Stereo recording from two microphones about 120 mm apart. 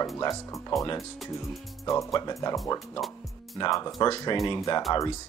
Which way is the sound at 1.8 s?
25° left (ahead or behind).